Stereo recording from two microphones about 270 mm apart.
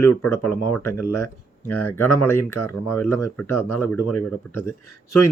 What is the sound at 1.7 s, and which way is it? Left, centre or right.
Speech, centre.